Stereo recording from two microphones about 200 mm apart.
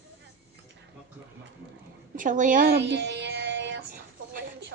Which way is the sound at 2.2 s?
40° right (ahead or behind).